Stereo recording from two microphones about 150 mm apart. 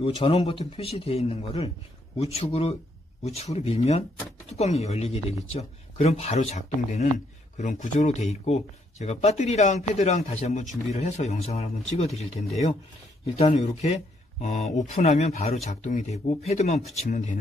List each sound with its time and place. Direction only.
0.0 s speech: 35° left (ahead or behind)